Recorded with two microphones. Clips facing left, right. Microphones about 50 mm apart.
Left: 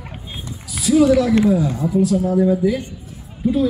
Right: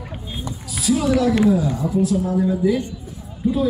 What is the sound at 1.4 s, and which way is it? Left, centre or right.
A man's voice, centre.